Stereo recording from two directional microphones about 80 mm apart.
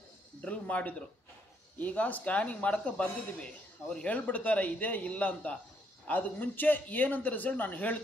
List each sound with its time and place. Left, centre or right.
0.4 s music: centre
1.8 s a man's voice: centre